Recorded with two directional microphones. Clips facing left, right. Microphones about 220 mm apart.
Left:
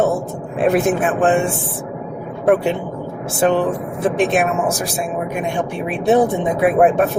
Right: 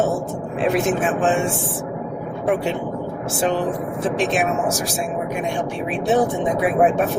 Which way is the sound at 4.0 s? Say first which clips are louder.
Left 5 dB; 55° left (ahead or behind).